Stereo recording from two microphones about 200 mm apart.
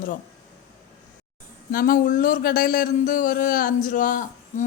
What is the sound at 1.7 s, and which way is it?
A man's voice, 45° left (ahead or behind).